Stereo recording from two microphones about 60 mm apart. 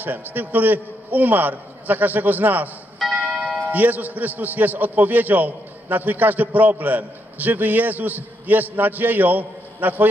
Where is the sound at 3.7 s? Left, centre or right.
Right.